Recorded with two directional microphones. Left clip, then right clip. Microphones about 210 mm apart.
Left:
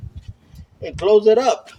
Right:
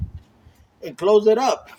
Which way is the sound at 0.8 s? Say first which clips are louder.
Left 2 dB; 25° right (ahead or behind).